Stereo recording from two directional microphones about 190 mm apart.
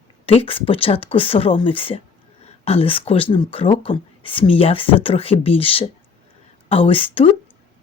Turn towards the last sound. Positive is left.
turn(degrees=30)  # may be behind; listen again after turning